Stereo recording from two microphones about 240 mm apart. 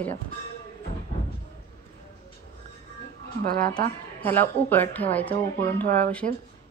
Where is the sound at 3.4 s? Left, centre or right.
Right.